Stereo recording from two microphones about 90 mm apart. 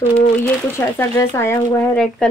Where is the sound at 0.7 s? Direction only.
30° left (ahead or behind).